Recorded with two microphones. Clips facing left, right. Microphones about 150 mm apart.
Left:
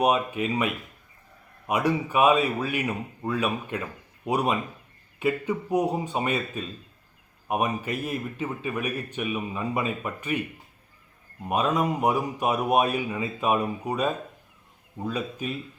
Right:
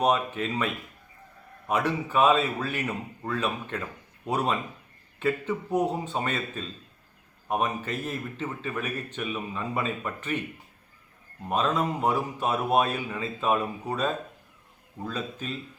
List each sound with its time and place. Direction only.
0.0 s speech: 10° left (ahead or behind)
11.4 s speech: 10° left (ahead or behind)